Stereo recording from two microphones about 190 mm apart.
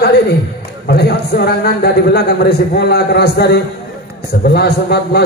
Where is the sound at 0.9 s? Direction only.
55° left (ahead or behind).